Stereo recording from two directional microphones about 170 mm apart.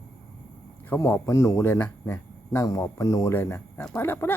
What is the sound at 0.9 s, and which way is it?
Speech, 15° left (ahead or behind).